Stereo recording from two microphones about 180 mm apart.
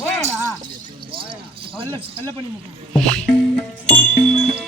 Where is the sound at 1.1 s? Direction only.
30° right (ahead or behind).